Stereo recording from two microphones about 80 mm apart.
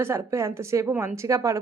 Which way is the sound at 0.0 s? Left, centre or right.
Right.